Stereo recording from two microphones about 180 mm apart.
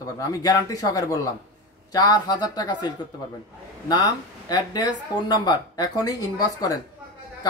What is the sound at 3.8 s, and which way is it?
Speech, 20° left (ahead or behind).